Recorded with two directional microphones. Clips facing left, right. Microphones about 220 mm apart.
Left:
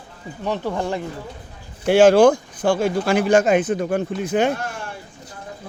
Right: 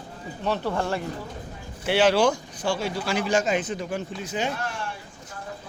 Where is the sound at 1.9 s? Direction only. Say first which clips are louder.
Left 8 dB; 45° left (ahead or behind).